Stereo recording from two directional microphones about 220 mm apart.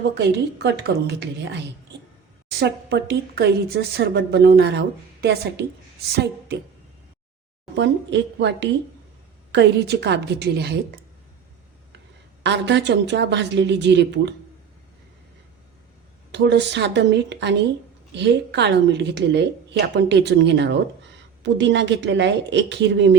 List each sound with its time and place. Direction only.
0.2 s speech: 50° right (ahead or behind)
7.8 s speech: 55° right (ahead or behind)
12.4 s speech: 50° right (ahead or behind)
16.3 s speech: 50° right (ahead or behind)